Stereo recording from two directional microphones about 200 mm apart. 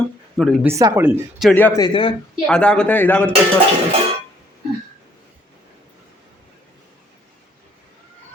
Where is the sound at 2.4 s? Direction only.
5° left (ahead or behind).